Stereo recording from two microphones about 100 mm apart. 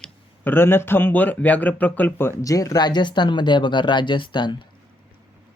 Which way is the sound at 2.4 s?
35° left (ahead or behind).